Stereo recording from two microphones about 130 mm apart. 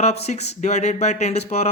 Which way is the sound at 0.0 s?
55° left (ahead or behind).